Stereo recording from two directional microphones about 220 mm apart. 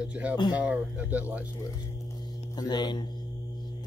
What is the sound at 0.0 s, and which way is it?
Speech, 5° right (ahead or behind).